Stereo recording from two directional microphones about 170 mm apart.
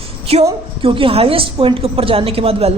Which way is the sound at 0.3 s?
35° right (ahead or behind).